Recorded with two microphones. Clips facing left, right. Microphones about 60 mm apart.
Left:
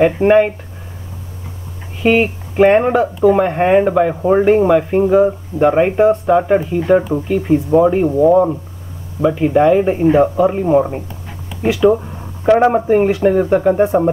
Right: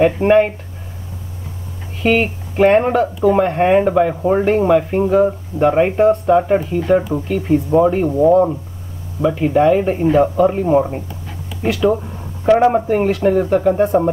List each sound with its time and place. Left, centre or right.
0.0 s speech: centre
2.0 s speech: centre